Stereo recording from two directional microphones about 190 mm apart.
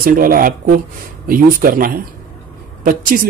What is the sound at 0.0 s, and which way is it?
A man's voice, 50° right (ahead or behind).